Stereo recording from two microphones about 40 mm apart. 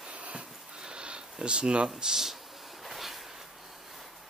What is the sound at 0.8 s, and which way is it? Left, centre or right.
Speech, right.